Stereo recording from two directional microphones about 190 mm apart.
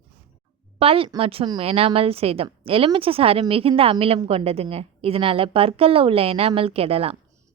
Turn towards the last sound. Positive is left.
turn(degrees=-30)  # may be behind; listen again after turning